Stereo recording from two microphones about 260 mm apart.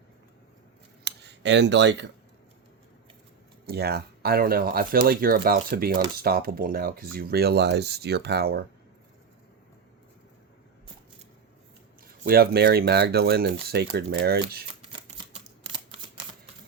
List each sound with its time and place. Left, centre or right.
1.0 s speech: right
3.7 s speech: right
12.0 s speech: right